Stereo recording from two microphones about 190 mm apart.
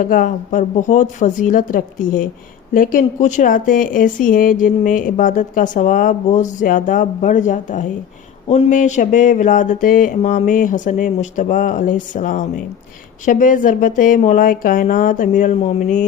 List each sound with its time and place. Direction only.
0.0 s speech: 45° left (ahead or behind)